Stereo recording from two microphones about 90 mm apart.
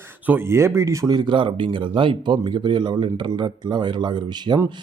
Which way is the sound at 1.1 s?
60° right (ahead or behind).